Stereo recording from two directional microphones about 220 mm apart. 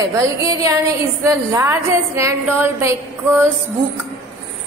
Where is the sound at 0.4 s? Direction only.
15° right (ahead or behind).